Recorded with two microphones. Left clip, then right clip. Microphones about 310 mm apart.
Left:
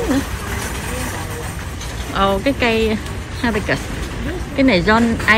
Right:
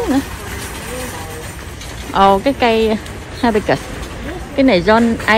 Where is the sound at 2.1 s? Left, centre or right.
Centre.